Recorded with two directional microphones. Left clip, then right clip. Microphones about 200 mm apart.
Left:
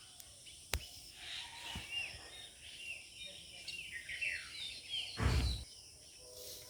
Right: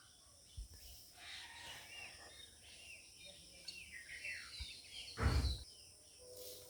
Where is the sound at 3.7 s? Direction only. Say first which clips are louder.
Left 6 dB; 55° right (ahead or behind).